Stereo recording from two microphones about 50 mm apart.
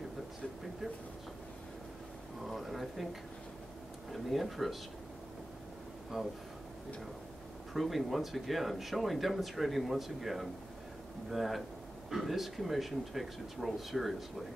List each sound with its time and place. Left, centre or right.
2.4 s a sound: centre
4.1 s speech: centre
6.1 s speech: centre
7.7 s speech: centre